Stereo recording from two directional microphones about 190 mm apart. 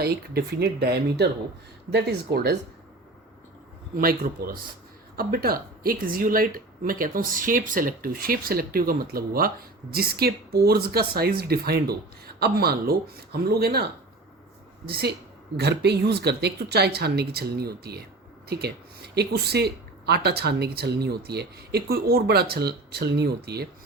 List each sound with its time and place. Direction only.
0.0 s speech: 55° right (ahead or behind)
3.9 s speech: 50° right (ahead or behind)
14.8 s speech: 55° right (ahead or behind)